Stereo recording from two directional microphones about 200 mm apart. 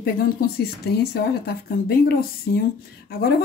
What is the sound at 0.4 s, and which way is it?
Speech, 50° left (ahead or behind).